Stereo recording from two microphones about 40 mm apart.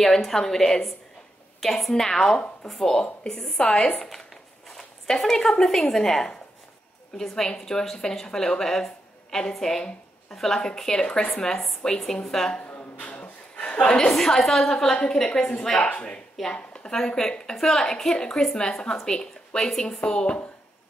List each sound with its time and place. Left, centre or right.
0.0 s a woman's voice: centre; by 11.4 s left
12.0 s a woman's voice: centre
12.6 s a sound: left
13.7 s a woman's voice: centre
15.2 s a woman's voice: left
16.5 s a sound: left
16.9 s a woman's voice: centre